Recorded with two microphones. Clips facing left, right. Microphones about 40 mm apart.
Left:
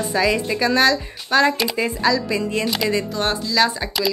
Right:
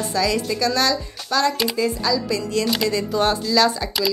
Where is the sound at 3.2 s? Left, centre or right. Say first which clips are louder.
Right 3 dB; centre.